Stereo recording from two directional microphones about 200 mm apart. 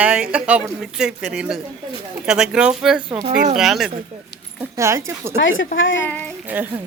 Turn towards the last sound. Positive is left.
turn(degrees=-10)  # may be behind; listen again after turning